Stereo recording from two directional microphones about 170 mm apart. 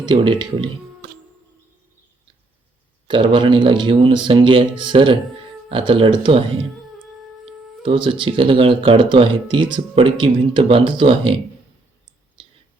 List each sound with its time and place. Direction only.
0.1 s speech: 30° right (ahead or behind)
3.1 s speech: 30° right (ahead or behind)
7.8 s speech: 30° right (ahead or behind)